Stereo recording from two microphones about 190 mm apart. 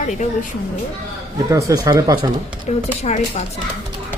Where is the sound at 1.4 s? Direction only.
15° right (ahead or behind).